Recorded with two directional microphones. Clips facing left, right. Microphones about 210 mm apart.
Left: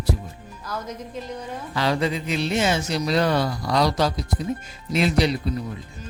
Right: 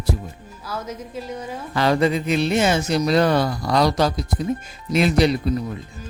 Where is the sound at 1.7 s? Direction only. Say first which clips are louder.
Right 5 dB; 50° right (ahead or behind).